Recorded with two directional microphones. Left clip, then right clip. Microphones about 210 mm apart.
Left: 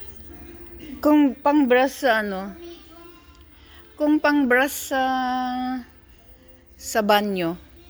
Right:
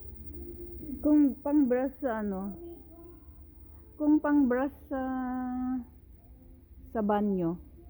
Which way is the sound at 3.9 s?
15° left (ahead or behind).